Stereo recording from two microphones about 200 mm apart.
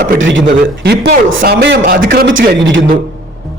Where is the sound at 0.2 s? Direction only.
65° right (ahead or behind).